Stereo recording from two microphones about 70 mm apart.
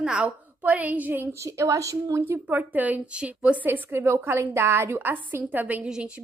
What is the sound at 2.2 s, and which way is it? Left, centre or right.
A woman's voice, right.